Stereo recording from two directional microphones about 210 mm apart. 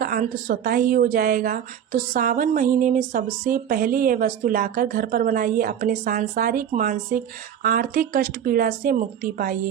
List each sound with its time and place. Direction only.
0.0 s a woman's voice: 45° right (ahead or behind)